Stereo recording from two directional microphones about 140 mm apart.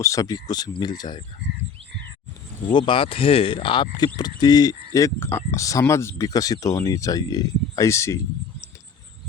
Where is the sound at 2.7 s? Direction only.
35° left (ahead or behind); by 8.2 s 20° left (ahead or behind).